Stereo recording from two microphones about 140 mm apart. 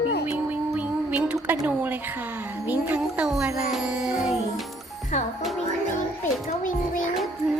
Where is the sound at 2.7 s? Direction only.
10° right (ahead or behind).